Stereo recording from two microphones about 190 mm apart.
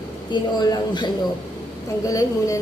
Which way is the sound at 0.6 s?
20° left (ahead or behind).